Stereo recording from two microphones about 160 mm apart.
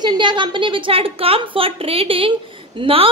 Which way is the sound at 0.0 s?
30° right (ahead or behind).